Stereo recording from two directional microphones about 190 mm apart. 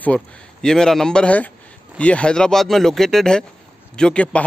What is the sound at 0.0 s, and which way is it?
A man's voice, 5° left (ahead or behind).